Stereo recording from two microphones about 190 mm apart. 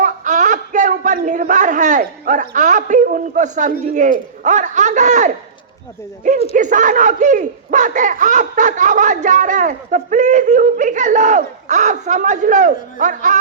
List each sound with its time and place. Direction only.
0.0 s speech: 40° right (ahead or behind)